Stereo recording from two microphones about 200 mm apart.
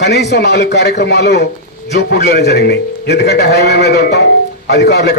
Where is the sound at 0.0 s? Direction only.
55° left (ahead or behind).